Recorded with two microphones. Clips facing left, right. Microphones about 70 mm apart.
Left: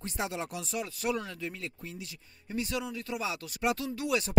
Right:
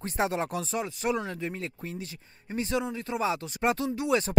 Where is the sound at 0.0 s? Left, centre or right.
Right.